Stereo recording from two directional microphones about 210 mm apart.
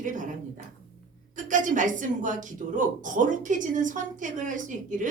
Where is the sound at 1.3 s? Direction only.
35° right (ahead or behind).